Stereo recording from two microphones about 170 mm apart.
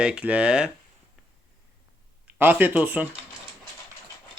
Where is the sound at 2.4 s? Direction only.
10° right (ahead or behind).